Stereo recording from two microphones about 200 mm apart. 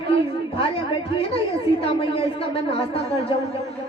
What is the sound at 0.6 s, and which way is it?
A woman's voice, 25° left (ahead or behind).